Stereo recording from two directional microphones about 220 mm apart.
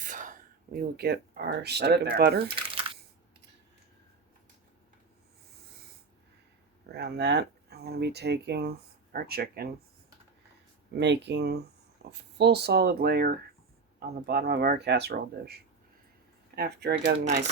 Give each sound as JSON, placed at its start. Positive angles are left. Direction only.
{"t": 0.0, "sound": "speech", "side_deg": -35}
{"t": 6.9, "sound": "speech", "side_deg": -50}
{"t": 11.0, "sound": "speech", "side_deg": -50}
{"t": 17.2, "sound": "speech", "side_deg": -30}